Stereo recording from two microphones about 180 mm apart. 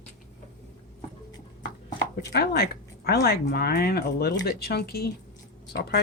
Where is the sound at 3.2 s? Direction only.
60° left (ahead or behind).